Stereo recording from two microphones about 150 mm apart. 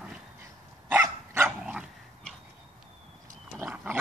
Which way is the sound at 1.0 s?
20° right (ahead or behind).